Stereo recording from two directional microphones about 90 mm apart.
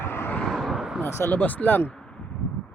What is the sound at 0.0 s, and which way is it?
Vehicle, 25° left (ahead or behind).